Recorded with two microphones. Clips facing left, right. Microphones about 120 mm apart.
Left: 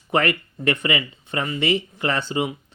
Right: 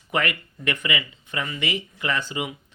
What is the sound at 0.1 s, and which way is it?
Speech, 35° left (ahead or behind).